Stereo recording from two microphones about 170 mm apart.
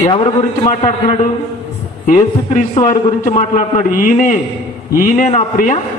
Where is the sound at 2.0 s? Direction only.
50° left (ahead or behind).